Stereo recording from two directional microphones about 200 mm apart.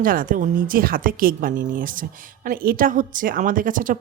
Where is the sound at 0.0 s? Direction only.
45° right (ahead or behind).